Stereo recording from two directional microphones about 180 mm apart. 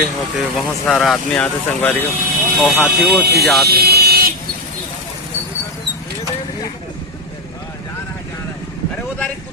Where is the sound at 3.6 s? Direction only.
60° right (ahead or behind).